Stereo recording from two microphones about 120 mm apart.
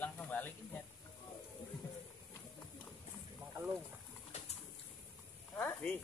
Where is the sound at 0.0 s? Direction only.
15° left (ahead or behind).